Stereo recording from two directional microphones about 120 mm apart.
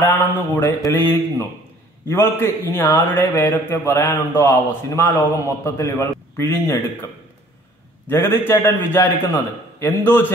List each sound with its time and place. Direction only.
0.1 s speech: 20° left (ahead or behind)
2.0 s a man's voice: 20° left (ahead or behind)
8.1 s a man's voice: 20° left (ahead or behind)